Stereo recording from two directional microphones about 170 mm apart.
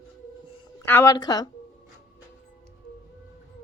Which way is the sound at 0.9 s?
15° left (ahead or behind).